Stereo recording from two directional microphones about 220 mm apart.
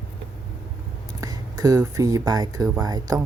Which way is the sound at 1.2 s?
15° right (ahead or behind).